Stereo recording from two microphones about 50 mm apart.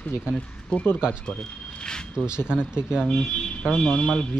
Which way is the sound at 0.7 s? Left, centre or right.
Left.